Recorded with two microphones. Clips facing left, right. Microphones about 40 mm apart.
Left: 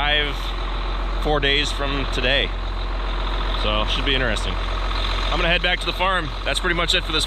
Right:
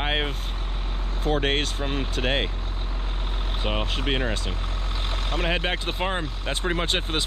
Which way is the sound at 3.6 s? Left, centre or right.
Left.